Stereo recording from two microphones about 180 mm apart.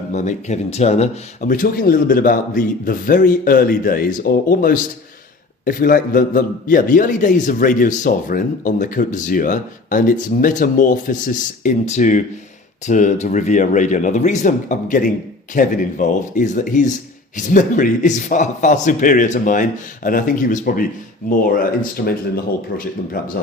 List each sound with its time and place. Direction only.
0.1 s a man's voice: 40° left (ahead or behind)